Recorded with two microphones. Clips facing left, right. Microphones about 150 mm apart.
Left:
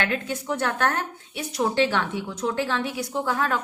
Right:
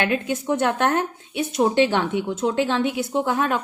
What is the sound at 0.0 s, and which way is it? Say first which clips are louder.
Speech: right 4 dB; 15° right (ahead or behind).